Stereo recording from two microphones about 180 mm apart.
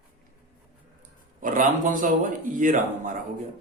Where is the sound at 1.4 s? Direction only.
50° right (ahead or behind).